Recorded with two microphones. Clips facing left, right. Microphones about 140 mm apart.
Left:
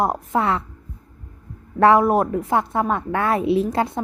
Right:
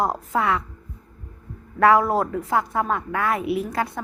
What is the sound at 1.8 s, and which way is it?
Speech, 25° left (ahead or behind).